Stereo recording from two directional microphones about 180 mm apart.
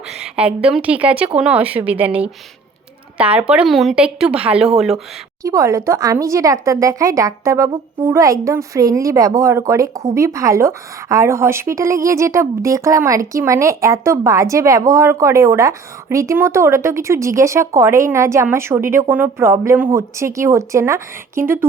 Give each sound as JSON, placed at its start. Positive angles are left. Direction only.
{"t": 0.1, "sound": "a woman's voice", "side_deg": -5}
{"t": 5.4, "sound": "a woman's voice", "side_deg": -20}